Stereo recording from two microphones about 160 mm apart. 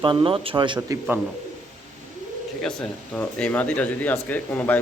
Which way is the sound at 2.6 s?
5° left (ahead or behind).